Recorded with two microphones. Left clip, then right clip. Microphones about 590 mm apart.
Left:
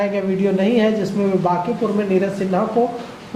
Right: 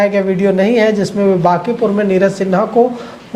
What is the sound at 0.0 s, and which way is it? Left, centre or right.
Speech, right.